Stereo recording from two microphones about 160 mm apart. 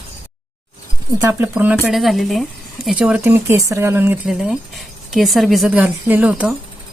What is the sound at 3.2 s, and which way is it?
Speech, 15° right (ahead or behind).